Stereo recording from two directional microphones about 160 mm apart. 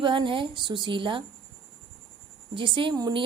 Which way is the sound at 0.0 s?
30° right (ahead or behind).